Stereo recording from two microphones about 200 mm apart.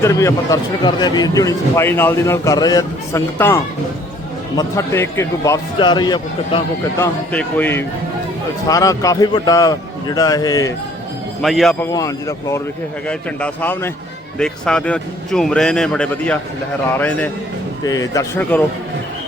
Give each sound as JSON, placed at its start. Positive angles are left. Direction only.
{"t": 0.0, "sound": "a man's voice", "side_deg": 15}
{"t": 7.0, "sound": "a man's voice", "side_deg": 10}
{"t": 11.4, "sound": "speech", "side_deg": 0}
{"t": 11.9, "sound": "a man's voice", "side_deg": 15}